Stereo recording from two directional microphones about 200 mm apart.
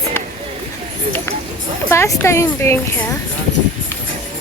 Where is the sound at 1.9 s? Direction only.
15° left (ahead or behind).